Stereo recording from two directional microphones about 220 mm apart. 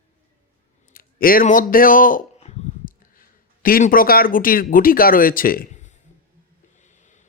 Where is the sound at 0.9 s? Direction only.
40° left (ahead or behind).